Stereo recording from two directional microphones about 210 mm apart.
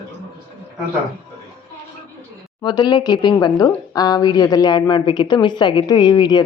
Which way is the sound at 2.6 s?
20° left (ahead or behind).